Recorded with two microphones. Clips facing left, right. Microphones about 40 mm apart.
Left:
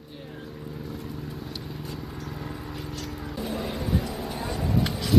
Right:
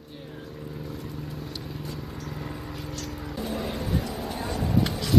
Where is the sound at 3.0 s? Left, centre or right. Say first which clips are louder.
Right 1 dB; centre.